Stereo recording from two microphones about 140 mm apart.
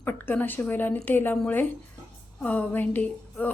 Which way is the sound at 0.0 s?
15° left (ahead or behind).